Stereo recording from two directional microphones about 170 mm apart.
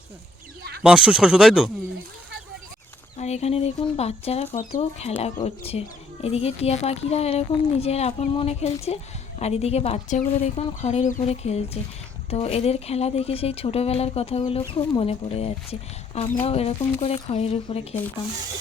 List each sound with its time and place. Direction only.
0.8 s speech: 5° right (ahead or behind)
3.2 s a sound: 40° left (ahead or behind)
3.9 s speech: 35° left (ahead or behind)